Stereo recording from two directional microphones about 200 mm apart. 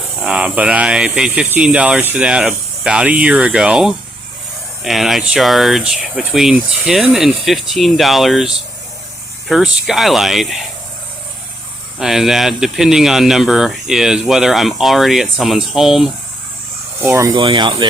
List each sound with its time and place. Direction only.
0.2 s speech: 5° right (ahead or behind)
11.9 s speech: centre (ahead or behind)
17.0 s speech: 15° right (ahead or behind)